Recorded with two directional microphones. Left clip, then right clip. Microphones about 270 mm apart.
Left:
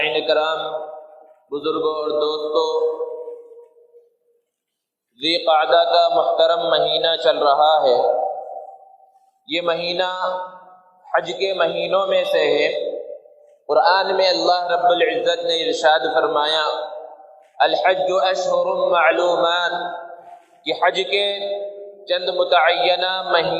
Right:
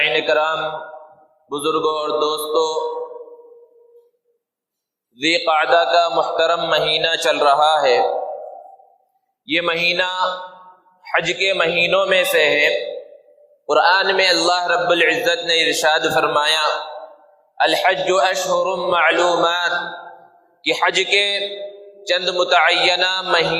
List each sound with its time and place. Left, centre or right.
0.0 s a man's voice: right
5.1 s a man's voice: right
9.5 s a man's voice: right